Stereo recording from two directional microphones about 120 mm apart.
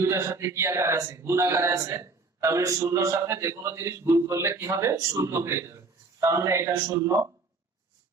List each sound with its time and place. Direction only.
0.0 s speech: 25° right (ahead or behind)